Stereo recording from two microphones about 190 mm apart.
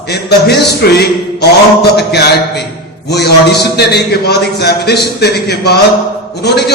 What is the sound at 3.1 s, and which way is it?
A man's voice, 60° left (ahead or behind).